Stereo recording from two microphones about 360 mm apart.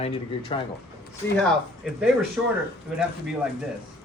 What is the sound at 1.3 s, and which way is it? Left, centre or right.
Speech, centre.